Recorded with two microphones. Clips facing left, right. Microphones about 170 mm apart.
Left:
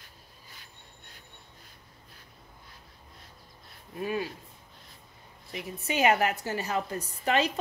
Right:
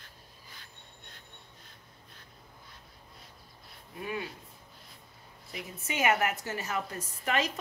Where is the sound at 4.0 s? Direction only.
30° left (ahead or behind).